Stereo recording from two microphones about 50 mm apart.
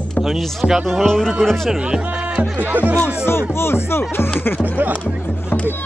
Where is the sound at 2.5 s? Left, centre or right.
Right.